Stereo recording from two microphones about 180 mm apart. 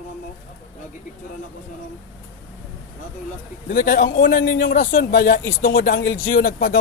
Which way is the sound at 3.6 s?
50° left (ahead or behind).